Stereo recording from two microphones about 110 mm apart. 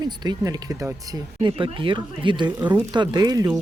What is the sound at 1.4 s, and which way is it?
Speech, 50° right (ahead or behind).